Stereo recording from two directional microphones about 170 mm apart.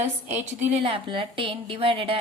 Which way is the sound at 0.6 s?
35° right (ahead or behind).